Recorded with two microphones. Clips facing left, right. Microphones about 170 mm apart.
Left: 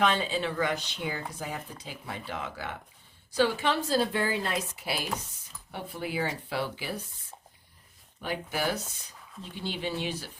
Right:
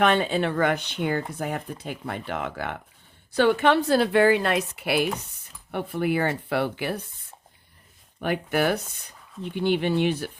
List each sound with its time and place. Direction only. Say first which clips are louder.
0.0 s speech: right 6 dB; 60° right (ahead or behind)
8.2 s speech: right 8 dB; 60° right (ahead or behind)